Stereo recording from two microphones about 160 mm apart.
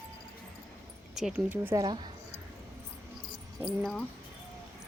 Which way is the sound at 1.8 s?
30° right (ahead or behind).